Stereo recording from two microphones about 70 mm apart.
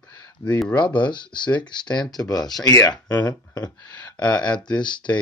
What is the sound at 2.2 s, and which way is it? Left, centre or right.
Speech, left.